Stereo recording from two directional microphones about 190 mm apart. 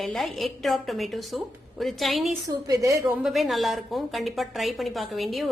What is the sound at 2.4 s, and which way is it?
Speech, 15° right (ahead or behind).